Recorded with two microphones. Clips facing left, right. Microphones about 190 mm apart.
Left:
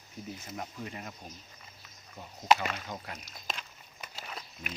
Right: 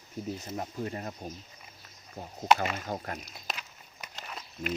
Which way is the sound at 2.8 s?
45° right (ahead or behind).